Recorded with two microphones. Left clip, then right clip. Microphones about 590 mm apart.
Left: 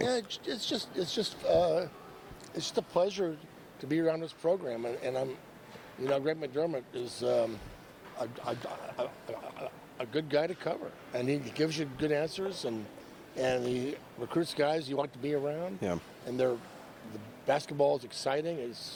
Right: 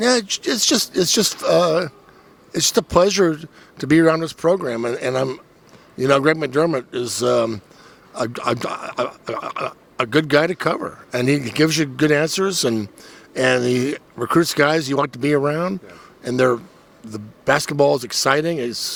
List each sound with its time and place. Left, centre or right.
0.0 s speech: right
2.5 s speech: right
3.8 s speech: right
6.0 s speech: right
8.1 s speech: right
13.3 s speech: right
16.2 s speech: right